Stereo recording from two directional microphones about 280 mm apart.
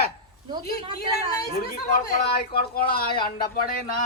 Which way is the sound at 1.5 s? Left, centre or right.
Left.